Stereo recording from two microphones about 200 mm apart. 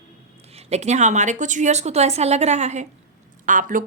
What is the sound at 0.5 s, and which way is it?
Speech, 35° right (ahead or behind).